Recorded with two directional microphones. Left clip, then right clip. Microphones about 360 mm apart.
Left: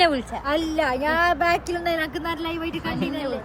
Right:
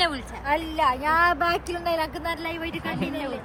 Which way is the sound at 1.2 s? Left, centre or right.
Centre.